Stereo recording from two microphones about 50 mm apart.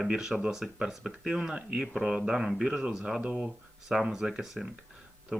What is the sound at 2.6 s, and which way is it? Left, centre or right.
Speech, centre.